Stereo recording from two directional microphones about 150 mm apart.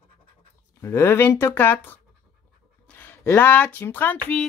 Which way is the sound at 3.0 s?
15° left (ahead or behind).